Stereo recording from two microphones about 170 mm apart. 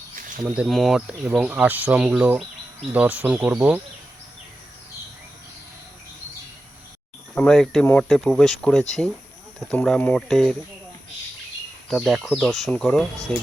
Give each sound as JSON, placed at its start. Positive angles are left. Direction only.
{"t": 0.2, "sound": "a sound", "side_deg": -50}
{"t": 0.4, "sound": "speech", "side_deg": -5}
{"t": 7.3, "sound": "speech", "side_deg": 5}
{"t": 11.9, "sound": "speech", "side_deg": 0}